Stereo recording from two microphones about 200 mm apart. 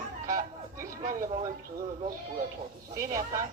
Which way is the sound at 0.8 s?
45° right (ahead or behind).